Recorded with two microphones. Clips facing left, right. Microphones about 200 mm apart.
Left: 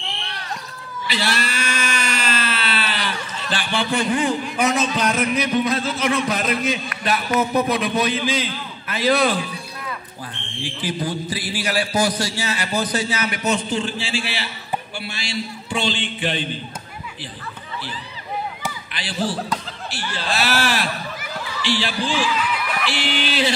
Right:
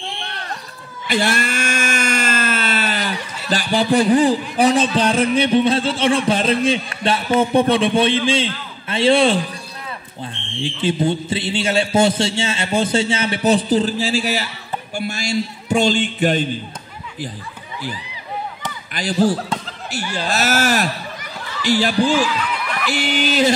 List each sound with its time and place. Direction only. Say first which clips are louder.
1.0 s a sound: right 5 dB; 50° right (ahead or behind)
3.4 s a man's voice: right 6 dB; 40° right (ahead or behind)
10.6 s a man's voice: right 7 dB; 25° right (ahead or behind); by 16.4 s 45° right (ahead or behind)
18.9 s a man's voice: right 8 dB; 45° right (ahead or behind)
22.5 s snicker: even; 5° left (ahead or behind)
22.8 s a man's voice: right 7 dB; 45° right (ahead or behind)